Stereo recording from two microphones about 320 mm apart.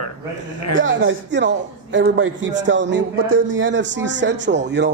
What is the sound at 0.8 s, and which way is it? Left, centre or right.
A man's voice, right.